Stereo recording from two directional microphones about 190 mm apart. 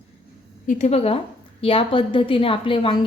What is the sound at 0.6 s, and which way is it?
A woman's voice, 40° left (ahead or behind).